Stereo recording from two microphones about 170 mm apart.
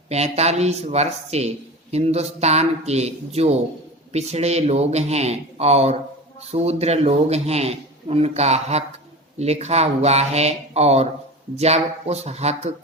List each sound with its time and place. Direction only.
0.1 s a man's voice: 40° right (ahead or behind)